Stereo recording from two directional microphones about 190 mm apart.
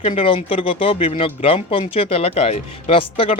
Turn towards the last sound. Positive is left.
turn(degrees=30)  # may be behind; listen again after turning